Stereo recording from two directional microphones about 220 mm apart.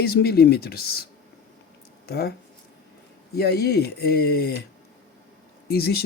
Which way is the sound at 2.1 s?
45° left (ahead or behind).